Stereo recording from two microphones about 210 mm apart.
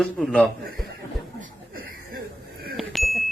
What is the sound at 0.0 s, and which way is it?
Speech, centre (ahead or behind).